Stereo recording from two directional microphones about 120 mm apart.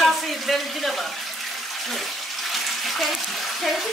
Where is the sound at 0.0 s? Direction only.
Centre (ahead or behind).